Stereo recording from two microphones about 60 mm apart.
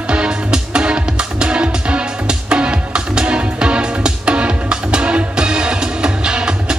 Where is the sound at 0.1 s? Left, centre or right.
Centre.